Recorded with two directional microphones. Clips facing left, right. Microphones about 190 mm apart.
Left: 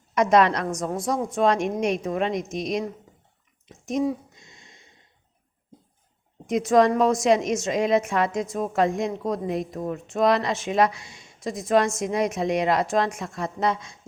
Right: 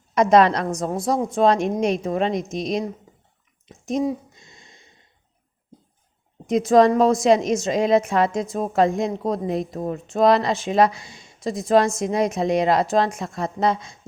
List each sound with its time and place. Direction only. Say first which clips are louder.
0.1 s a woman's voice: right 3 dB; 30° right (ahead or behind)
3.9 s a woman's voice: right 1 dB; 30° right (ahead or behind)
6.5 s a woman's voice: right 3 dB; 30° right (ahead or behind)